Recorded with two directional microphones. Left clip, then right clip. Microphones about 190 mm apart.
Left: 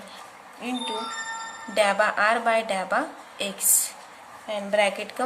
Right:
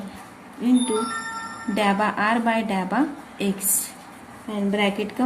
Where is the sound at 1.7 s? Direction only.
15° left (ahead or behind).